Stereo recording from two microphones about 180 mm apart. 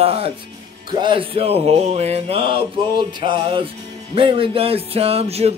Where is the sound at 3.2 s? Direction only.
25° right (ahead or behind).